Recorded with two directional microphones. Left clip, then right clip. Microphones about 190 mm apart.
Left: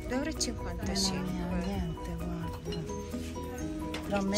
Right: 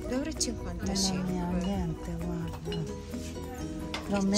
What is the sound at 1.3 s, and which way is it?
Speech, 60° right (ahead or behind).